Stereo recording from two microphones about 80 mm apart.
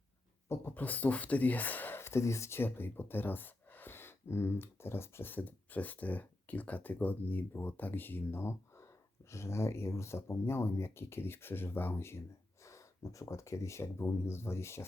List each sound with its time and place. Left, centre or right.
0.4 s speech: left
0.7 s speech: left